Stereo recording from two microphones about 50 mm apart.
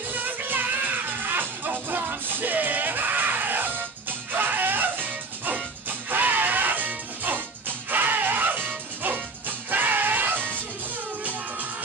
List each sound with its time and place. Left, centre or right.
0.1 s music: right